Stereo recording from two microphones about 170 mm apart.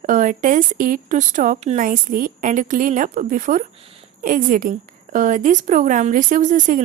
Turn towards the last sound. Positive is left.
turn(degrees=-50)  # may be behind; listen again after turning